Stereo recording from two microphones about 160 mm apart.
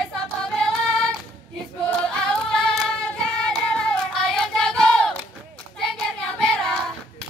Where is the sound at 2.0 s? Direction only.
Centre (ahead or behind).